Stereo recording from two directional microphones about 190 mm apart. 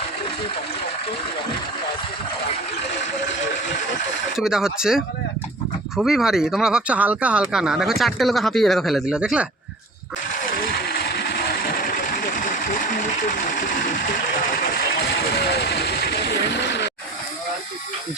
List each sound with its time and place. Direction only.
4.4 s speech: 5° right (ahead or behind)
10.4 s vehicle: 50° left (ahead or behind)
13.2 s speech: 45° left (ahead or behind)
14.5 s vehicle: 55° left (ahead or behind)